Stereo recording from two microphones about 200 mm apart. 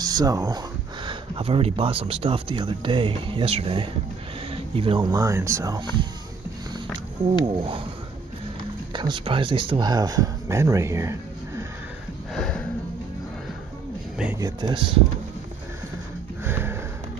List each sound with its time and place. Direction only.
0.0 s speech: 20° right (ahead or behind)
7.4 s speech: 25° right (ahead or behind)
8.9 s speech: 25° right (ahead or behind)
12.4 s a sound: 5° left (ahead or behind)
14.1 s speech: 5° right (ahead or behind)
14.4 s speech: 20° right (ahead or behind)
16.4 s sniff: 10° right (ahead or behind)